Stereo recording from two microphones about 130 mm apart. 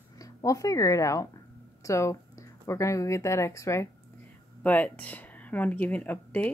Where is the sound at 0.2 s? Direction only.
25° left (ahead or behind).